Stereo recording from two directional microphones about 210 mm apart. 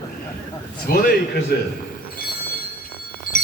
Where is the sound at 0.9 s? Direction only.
45° left (ahead or behind).